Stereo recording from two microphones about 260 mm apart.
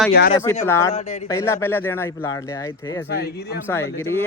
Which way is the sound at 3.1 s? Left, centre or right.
Left.